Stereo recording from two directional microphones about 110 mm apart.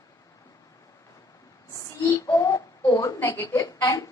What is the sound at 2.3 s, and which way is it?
A woman's voice, 30° left (ahead or behind).